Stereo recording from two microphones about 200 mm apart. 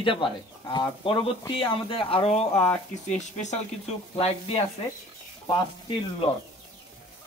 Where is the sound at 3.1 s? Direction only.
35° left (ahead or behind).